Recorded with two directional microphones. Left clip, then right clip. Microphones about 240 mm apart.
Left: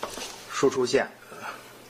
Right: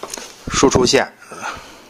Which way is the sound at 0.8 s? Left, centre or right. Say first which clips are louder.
Right 9 dB; right.